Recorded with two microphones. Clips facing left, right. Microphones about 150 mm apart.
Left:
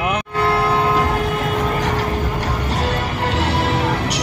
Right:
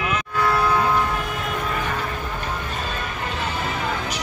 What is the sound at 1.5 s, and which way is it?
Music, 90° left.